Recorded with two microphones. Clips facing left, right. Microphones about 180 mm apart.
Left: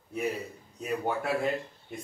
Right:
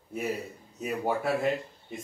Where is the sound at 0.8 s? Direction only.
Centre (ahead or behind).